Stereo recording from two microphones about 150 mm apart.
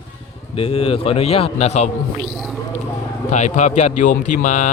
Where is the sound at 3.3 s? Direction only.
50° left (ahead or behind).